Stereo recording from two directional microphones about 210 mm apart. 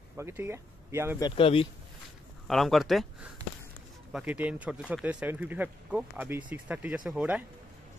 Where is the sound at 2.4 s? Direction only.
Centre (ahead or behind).